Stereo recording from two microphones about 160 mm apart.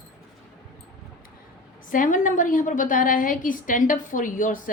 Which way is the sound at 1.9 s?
55° left (ahead or behind).